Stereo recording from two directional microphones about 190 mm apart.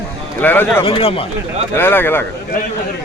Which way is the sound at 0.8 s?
30° left (ahead or behind).